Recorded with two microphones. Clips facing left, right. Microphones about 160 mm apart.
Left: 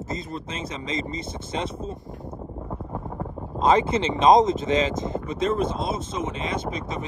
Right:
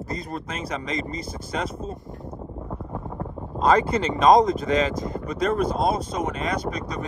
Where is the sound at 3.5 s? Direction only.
25° left (ahead or behind).